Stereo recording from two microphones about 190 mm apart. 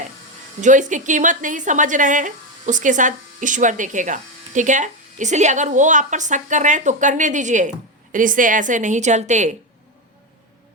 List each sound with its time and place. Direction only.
0.6 s a woman's voice: 40° right (ahead or behind)